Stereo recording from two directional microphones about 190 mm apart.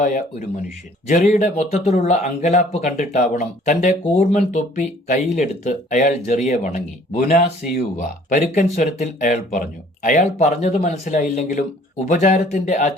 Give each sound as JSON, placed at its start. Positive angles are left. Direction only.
{"t": 0.0, "sound": "a man's voice", "side_deg": 45}